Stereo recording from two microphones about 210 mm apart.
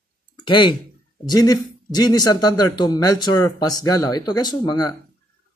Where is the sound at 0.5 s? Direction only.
20° left (ahead or behind).